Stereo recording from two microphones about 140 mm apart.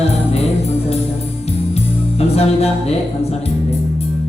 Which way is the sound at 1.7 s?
45° left (ahead or behind).